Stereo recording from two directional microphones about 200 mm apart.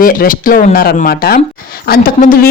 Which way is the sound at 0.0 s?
45° left (ahead or behind).